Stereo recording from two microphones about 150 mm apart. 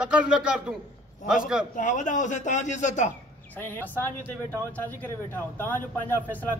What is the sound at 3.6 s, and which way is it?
Speech, 15° left (ahead or behind).